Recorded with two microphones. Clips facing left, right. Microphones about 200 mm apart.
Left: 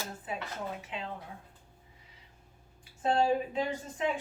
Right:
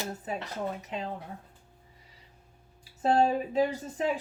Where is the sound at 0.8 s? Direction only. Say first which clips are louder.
Right 4 dB; 40° right (ahead or behind).